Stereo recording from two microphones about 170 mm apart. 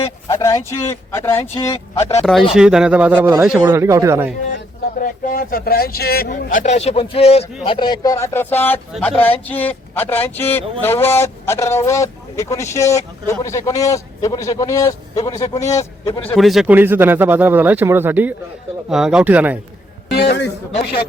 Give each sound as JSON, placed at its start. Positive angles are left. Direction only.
{"t": 0.3, "sound": "speech", "side_deg": 20}
{"t": 2.5, "sound": "speech", "side_deg": -5}
{"t": 4.5, "sound": "speech", "side_deg": 55}
{"t": 16.2, "sound": "speech", "side_deg": 5}
{"t": 20.1, "sound": "a man's voice", "side_deg": 90}